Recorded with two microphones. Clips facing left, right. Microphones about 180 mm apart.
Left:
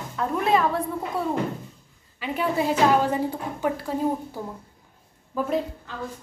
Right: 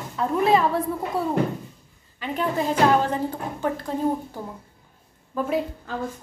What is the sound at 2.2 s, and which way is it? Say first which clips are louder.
A woman's voice: even; 5° left (ahead or behind).